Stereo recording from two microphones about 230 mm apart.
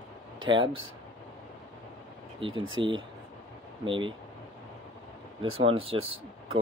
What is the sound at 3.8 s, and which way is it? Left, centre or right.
Speech, right.